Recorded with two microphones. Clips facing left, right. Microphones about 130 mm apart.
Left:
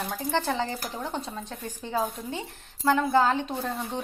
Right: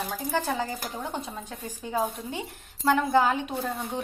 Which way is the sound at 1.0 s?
10° right (ahead or behind).